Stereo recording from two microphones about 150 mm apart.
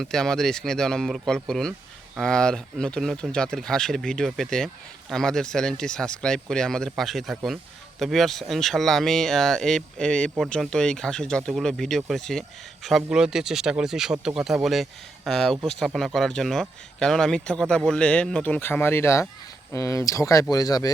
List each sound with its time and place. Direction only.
0.0 s speech: 5° left (ahead or behind); by 20.9 s 25° left (ahead or behind)